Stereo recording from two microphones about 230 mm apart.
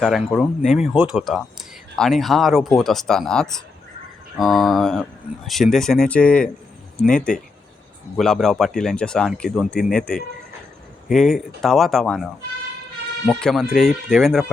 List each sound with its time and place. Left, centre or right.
0.0 s speech: centre